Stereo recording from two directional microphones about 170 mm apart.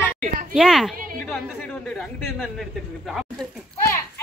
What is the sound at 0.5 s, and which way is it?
Speech, 5° right (ahead or behind).